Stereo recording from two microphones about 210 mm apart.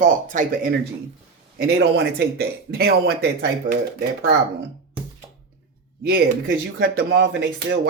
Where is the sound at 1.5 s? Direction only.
50° right (ahead or behind).